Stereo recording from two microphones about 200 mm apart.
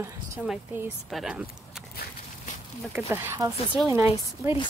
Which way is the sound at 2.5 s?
40° left (ahead or behind).